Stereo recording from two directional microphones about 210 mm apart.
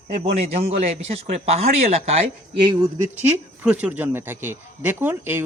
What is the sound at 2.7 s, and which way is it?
Speech, 15° right (ahead or behind).